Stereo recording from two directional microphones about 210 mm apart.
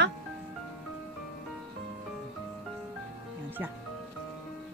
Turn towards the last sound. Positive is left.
turn(degrees=-10)  # may be behind; listen again after turning